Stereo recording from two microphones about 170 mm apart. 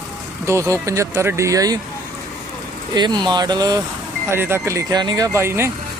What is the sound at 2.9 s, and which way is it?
Speech, 25° right (ahead or behind).